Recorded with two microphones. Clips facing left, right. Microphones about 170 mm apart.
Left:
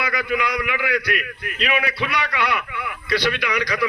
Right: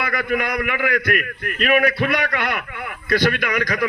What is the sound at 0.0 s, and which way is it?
A man's voice, 50° right (ahead or behind).